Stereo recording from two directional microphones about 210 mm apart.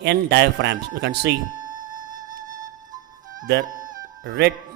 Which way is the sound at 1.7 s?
40° right (ahead or behind).